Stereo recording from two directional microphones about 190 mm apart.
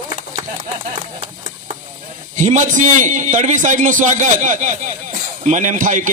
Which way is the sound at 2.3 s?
40° right (ahead or behind).